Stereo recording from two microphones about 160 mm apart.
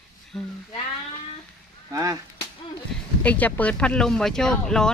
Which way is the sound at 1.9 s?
20° right (ahead or behind).